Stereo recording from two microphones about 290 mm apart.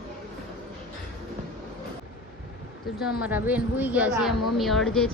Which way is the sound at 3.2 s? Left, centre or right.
Centre.